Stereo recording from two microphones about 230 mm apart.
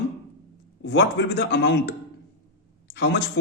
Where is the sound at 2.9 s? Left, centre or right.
Left.